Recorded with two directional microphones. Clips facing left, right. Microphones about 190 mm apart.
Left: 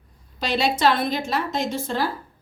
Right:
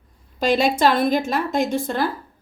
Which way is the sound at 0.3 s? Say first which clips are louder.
Right 5 dB; 50° right (ahead or behind).